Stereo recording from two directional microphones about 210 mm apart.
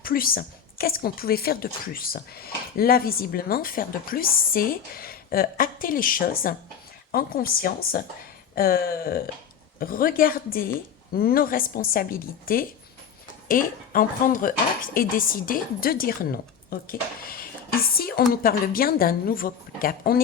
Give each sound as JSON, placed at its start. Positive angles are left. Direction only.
{"t": 0.0, "sound": "a woman's voice", "side_deg": 45}